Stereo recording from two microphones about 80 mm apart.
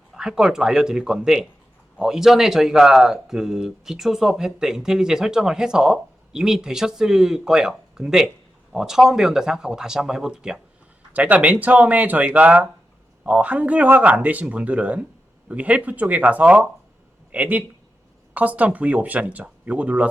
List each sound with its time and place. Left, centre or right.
0.1 s speech: centre
11.1 s speech: centre